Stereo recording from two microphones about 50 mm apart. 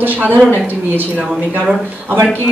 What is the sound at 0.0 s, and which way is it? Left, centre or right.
Speech, right.